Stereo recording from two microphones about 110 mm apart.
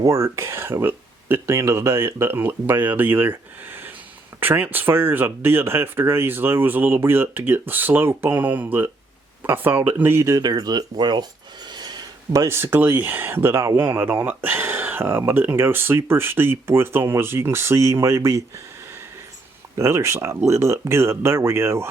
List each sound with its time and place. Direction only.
0.0 s speech: 25° right (ahead or behind)